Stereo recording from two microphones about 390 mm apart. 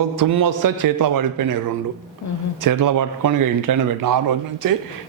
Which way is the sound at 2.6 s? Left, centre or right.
Right.